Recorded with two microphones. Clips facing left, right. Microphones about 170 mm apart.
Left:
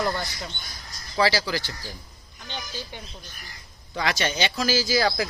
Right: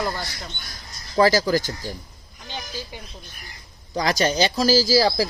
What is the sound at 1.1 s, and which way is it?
Speech, 45° right (ahead or behind).